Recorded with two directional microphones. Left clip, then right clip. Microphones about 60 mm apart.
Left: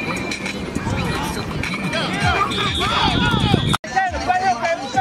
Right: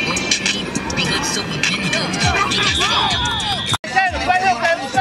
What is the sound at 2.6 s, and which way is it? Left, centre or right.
Speech, right.